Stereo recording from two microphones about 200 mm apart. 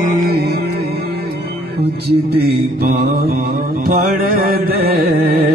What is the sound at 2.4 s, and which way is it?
Music, 50° right (ahead or behind).